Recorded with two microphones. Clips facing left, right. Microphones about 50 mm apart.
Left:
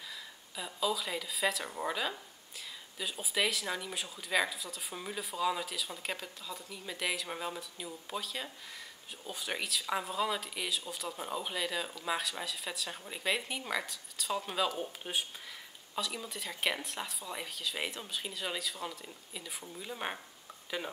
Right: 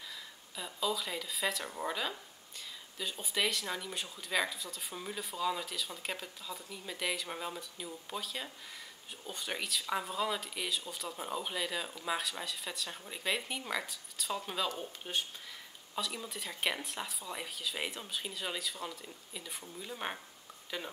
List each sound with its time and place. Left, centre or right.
0.1 s speech: centre